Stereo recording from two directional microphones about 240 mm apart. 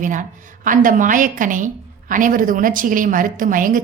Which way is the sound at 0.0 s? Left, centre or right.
Right.